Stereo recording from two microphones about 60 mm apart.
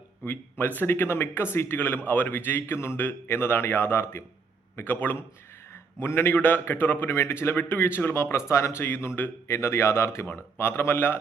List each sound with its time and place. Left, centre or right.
0.3 s a man's voice: left
1.8 s a man's voice: left
3.0 s a man's voice: left
5.7 s a man's voice: left
8.1 s speech: left
9.1 s a man's voice: left
9.6 s a man's voice: left